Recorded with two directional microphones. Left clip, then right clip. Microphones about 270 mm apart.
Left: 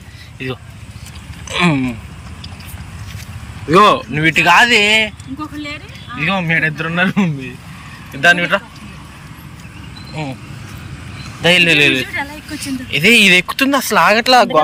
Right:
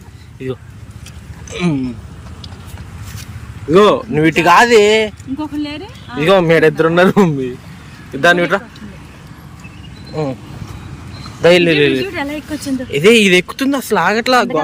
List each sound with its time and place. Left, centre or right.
0.3 s speech: centre
1.5 s a sound: centre
3.7 s speech: centre
5.6 s speech: centre
6.1 s speech: right
10.2 s speech: centre
11.4 s speech: centre